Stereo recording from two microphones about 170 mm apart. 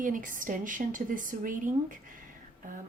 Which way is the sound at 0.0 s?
50° right (ahead or behind).